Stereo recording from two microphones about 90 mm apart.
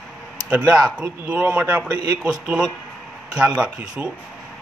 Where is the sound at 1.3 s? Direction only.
10° right (ahead or behind).